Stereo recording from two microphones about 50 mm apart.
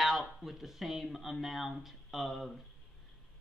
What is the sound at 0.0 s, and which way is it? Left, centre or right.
A woman's voice, centre.